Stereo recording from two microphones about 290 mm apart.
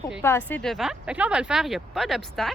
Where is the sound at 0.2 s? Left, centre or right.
Centre.